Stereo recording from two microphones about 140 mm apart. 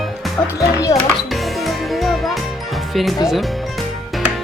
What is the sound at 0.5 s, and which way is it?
Speech, 25° left (ahead or behind).